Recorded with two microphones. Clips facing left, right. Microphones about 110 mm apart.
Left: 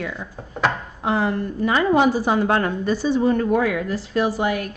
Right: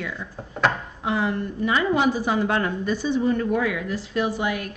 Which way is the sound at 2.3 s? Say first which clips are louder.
Left 3 dB; 50° left (ahead or behind).